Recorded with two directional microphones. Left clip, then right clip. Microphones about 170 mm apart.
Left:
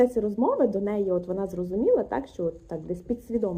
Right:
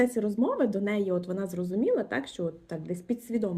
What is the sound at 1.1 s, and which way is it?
Speech, 35° right (ahead or behind).